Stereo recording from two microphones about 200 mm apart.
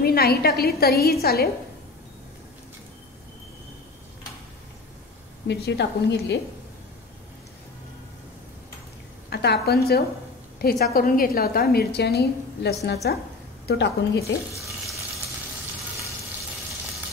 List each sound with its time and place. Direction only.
0.0 s a woman's voice: 50° left (ahead or behind)
5.5 s a woman's voice: 60° left (ahead or behind)
9.3 s a woman's voice: 55° left (ahead or behind)
14.5 s water tap: 15° right (ahead or behind)